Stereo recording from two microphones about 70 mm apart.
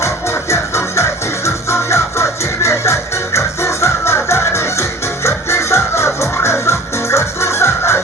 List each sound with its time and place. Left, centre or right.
0.0 s music: left